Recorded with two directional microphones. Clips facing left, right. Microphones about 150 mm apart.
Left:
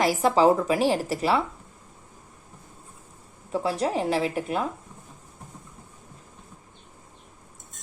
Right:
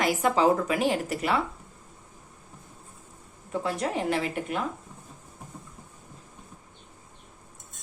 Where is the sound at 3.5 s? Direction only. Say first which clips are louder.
Left 3 dB; 30° left (ahead or behind).